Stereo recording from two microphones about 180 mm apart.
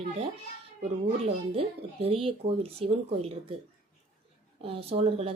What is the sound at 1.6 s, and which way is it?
Speech, 35° right (ahead or behind).